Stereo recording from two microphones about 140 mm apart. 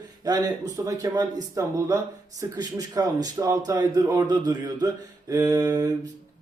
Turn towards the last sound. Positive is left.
turn(degrees=-25)  # may be behind; listen again after turning